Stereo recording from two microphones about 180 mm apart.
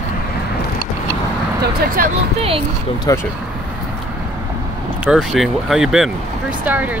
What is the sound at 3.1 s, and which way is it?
Speech, 20° left (ahead or behind).